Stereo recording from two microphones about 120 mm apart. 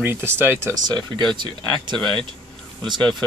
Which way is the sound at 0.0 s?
20° right (ahead or behind).